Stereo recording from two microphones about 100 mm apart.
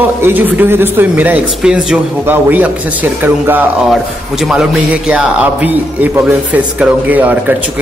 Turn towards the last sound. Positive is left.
turn(degrees=-15)  # may be behind; listen again after turning